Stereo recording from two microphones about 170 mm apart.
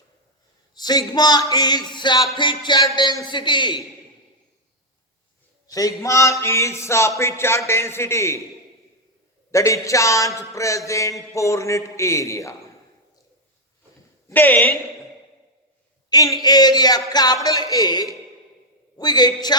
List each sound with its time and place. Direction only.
0.7 s a man's voice: 25° left (ahead or behind)
5.7 s mantra: 20° left (ahead or behind)
9.5 s mantra: 20° left (ahead or behind)
14.3 s a woman's voice: 10° left (ahead or behind)
16.0 s a man's voice: 20° left (ahead or behind)